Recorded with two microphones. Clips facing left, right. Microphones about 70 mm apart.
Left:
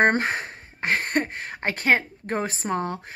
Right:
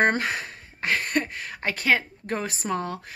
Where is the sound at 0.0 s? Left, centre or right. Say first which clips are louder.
Left 2 dB; left.